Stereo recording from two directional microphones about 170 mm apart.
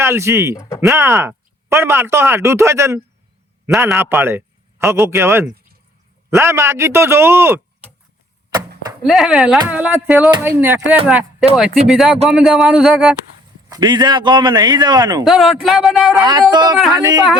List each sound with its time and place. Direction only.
0.0 s speech: 15° right (ahead or behind)
0.5 s speech: 15° left (ahead or behind)
0.8 s speech: 15° right (ahead or behind)
9.0 s a man's voice: centre (ahead or behind)
13.7 s a man's voice: 25° right (ahead or behind)
15.2 s a man's voice: centre (ahead or behind)
16.2 s a man's voice: 25° right (ahead or behind)